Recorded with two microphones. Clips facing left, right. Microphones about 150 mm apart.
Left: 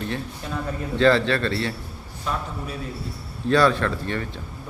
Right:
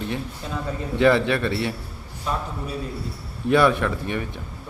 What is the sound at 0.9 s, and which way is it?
Speech, 15° right (ahead or behind).